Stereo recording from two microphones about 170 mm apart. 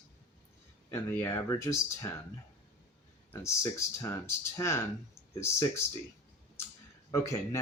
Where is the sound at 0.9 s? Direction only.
15° left (ahead or behind).